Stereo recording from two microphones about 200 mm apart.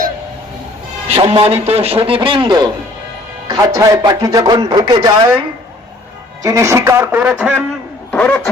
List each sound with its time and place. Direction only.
1.0 s speech: 30° right (ahead or behind)
6.4 s speech: 15° right (ahead or behind)
8.1 s a sound: 5° left (ahead or behind)